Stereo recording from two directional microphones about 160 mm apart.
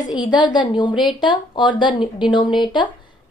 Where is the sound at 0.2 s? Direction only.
25° left (ahead or behind).